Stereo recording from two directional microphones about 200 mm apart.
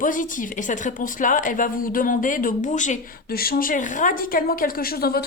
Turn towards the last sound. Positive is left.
turn(degrees=50)  # may be behind; listen again after turning